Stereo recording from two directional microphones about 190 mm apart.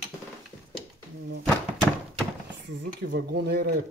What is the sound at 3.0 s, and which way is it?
Speech, 60° right (ahead or behind).